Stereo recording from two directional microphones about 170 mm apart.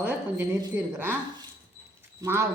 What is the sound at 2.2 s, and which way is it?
Speech, 15° right (ahead or behind).